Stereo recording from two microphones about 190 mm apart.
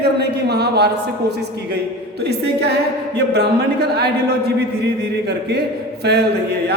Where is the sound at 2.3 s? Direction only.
60° right (ahead or behind).